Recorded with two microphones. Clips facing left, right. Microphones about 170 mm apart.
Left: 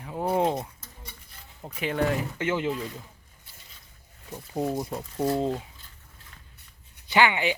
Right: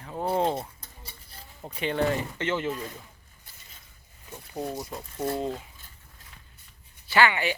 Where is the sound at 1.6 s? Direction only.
5° left (ahead or behind).